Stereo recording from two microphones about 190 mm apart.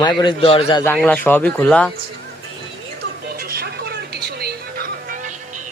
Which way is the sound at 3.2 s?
55° right (ahead or behind).